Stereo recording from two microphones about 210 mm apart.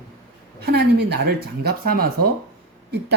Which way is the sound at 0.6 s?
50° right (ahead or behind).